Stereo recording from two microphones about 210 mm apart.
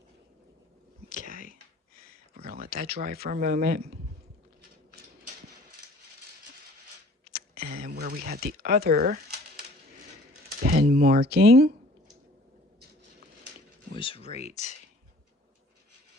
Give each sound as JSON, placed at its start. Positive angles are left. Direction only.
{"t": 2.4, "sound": "speech", "side_deg": -45}
{"t": 7.3, "sound": "a sound", "side_deg": -45}
{"t": 7.9, "sound": "speech", "side_deg": -45}
{"t": 10.6, "sound": "speech", "side_deg": -40}
{"t": 13.9, "sound": "speech", "side_deg": 25}